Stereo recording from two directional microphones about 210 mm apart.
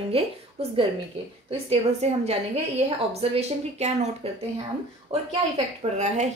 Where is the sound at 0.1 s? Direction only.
30° right (ahead or behind).